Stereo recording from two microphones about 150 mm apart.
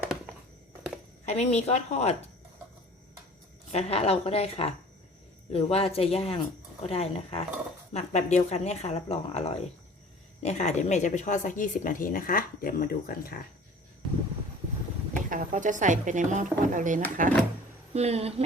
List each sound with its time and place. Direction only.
1.2 s speech: 45° left (ahead or behind)
3.7 s speech: 45° left (ahead or behind); by 13.4 s 75° left (ahead or behind)
15.3 s speech: 60° right (ahead or behind)
17.9 s speech: 45° right (ahead or behind)